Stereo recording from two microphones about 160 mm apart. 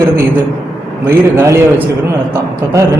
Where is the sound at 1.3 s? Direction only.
15° right (ahead or behind).